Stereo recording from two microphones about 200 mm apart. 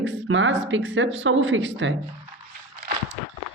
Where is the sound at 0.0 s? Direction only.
70° right (ahead or behind).